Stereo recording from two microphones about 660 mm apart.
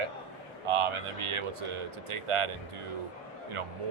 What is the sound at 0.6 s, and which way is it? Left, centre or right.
Speech, right.